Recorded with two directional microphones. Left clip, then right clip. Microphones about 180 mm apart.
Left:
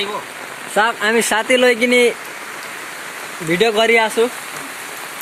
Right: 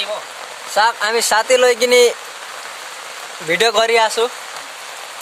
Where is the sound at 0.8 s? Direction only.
5° right (ahead or behind).